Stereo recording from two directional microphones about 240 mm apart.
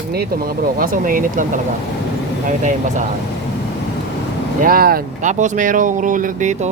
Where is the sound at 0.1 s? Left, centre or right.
Right.